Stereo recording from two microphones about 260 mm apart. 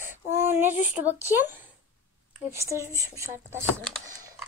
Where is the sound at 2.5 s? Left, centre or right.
Centre.